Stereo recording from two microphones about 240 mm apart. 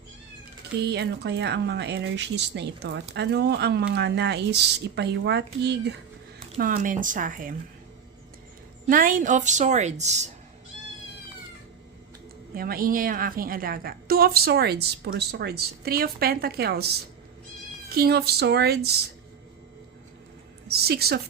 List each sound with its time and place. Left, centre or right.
0.9 s speech: right
6.6 s a woman's voice: right
8.9 s a woman's voice: right
12.5 s a woman's voice: right
20.7 s a woman's voice: right